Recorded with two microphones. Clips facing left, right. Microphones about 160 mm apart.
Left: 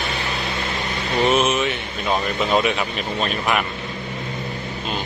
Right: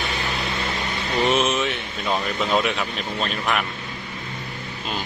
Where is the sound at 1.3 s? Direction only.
Centre (ahead or behind).